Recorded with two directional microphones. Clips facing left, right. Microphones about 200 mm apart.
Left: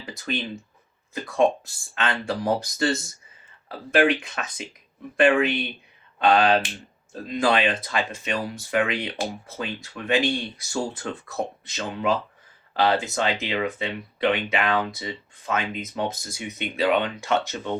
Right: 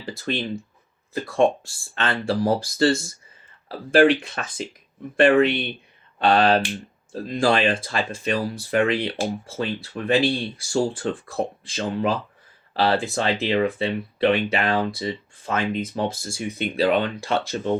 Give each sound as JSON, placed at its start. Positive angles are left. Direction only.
{"t": 1.1, "sound": "speech", "side_deg": -30}